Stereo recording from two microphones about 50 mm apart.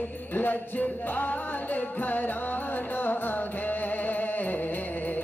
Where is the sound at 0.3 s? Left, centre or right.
Left.